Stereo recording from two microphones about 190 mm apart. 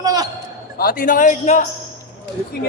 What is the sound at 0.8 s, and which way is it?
Speech, 50° left (ahead or behind).